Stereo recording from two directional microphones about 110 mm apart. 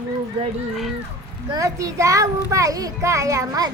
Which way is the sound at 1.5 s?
30° right (ahead or behind).